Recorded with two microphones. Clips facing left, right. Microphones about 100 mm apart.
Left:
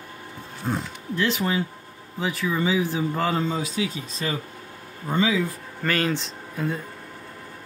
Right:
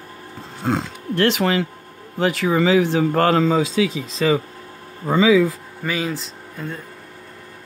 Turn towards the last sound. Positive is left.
turn(degrees=0)  # may be behind; listen again after turning